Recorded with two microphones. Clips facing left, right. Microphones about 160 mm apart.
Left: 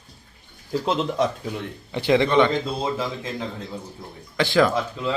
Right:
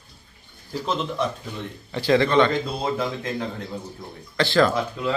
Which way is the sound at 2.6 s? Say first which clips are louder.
Even; 5° left (ahead or behind).